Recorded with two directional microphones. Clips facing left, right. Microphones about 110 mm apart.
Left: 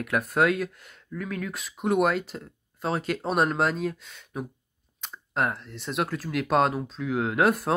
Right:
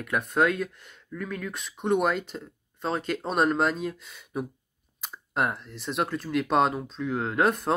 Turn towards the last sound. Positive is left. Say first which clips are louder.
# left 1 dB
turn(degrees=0)  # may be behind; listen again after turning